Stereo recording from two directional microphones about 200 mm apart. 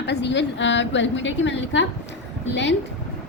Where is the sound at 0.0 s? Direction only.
60° left (ahead or behind).